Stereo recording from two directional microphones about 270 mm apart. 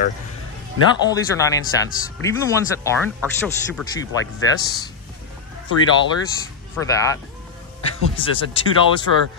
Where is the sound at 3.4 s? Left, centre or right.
Centre.